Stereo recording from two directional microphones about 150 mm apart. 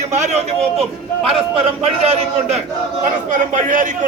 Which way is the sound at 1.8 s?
40° right (ahead or behind).